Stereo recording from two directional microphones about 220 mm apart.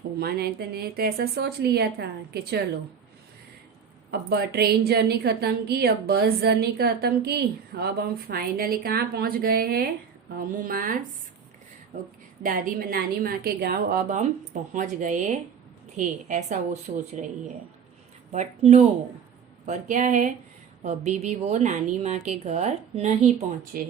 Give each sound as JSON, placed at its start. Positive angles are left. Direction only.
{"t": 0.2, "sound": "a woman's voice", "side_deg": -45}
{"t": 4.1, "sound": "a woman's voice", "side_deg": -45}
{"t": 12.4, "sound": "a woman's voice", "side_deg": -40}
{"t": 18.3, "sound": "a woman's voice", "side_deg": -30}
{"t": 23.7, "sound": "a woman's voice", "side_deg": -40}